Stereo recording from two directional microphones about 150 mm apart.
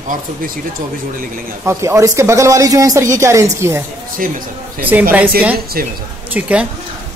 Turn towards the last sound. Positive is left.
turn(degrees=-10)  # may be behind; listen again after turning